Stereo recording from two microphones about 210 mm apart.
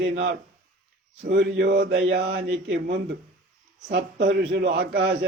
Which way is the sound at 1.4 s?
50° right (ahead or behind).